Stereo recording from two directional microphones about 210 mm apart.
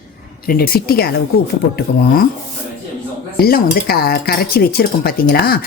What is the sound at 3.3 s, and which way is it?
A woman's voice, 45° left (ahead or behind).